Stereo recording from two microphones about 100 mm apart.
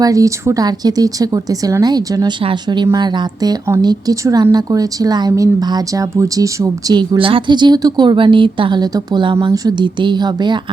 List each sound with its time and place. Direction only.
0.0 s a woman's voice: 35° right (ahead or behind)
4.1 s speech: 35° right (ahead or behind)
7.2 s a woman's voice: 60° right (ahead or behind)